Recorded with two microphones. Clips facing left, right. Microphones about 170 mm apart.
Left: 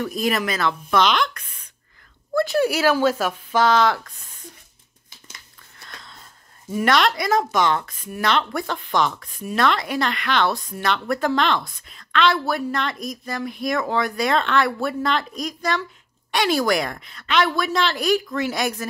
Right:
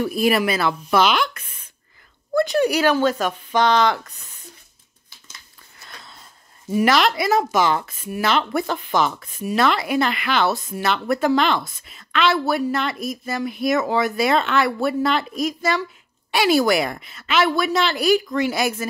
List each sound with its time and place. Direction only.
0.0 s speech: 10° right (ahead or behind)
6.7 s speech: 5° right (ahead or behind)